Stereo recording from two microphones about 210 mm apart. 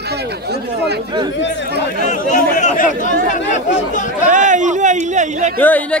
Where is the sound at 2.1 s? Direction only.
35° left (ahead or behind).